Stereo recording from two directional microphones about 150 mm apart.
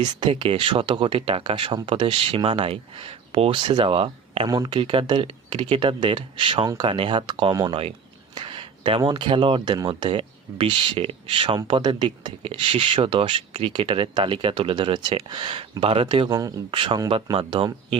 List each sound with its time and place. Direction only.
0.0 s speech: 35° right (ahead or behind)